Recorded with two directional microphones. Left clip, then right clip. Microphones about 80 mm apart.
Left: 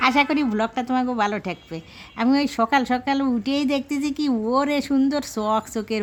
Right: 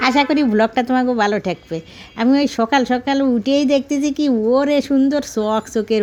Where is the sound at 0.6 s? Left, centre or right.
Right.